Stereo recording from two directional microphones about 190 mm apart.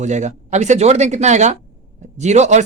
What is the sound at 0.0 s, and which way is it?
Speech, 40° right (ahead or behind).